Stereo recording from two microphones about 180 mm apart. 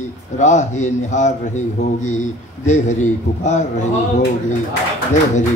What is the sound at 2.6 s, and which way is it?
A man's voice, 40° left (ahead or behind).